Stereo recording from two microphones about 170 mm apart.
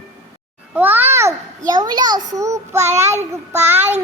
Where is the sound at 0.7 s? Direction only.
10° right (ahead or behind).